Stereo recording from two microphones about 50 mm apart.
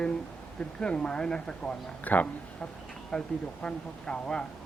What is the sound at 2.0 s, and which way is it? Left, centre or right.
Speech, left.